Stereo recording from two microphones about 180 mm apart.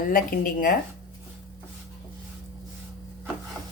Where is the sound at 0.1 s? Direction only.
50° left (ahead or behind).